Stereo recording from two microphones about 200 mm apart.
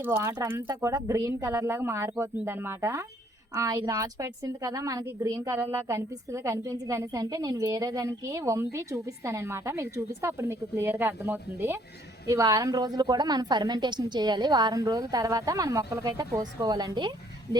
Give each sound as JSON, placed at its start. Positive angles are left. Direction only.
{"t": 0.0, "sound": "a woman's voice", "side_deg": -10}